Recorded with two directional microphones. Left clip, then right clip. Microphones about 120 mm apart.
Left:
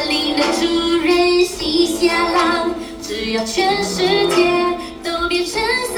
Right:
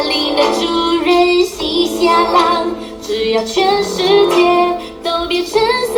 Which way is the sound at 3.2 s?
30° right (ahead or behind).